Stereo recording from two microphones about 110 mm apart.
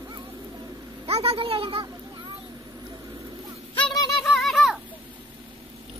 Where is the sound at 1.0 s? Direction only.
65° right (ahead or behind).